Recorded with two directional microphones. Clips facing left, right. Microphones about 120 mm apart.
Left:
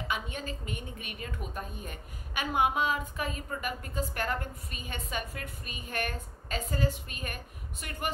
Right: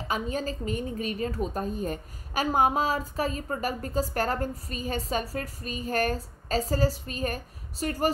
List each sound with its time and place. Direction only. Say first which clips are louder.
0.1 s a woman's voice: right 8 dB; 35° right (ahead or behind)